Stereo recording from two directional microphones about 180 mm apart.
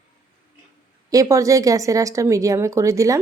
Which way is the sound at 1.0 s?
20° right (ahead or behind).